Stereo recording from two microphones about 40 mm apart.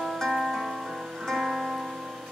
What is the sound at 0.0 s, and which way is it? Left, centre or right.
Music, centre.